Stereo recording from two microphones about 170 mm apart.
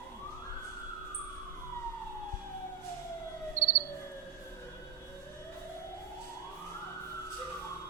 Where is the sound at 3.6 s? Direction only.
15° right (ahead or behind).